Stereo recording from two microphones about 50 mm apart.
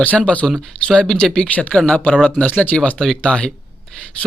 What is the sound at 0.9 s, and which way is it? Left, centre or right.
Speech, centre.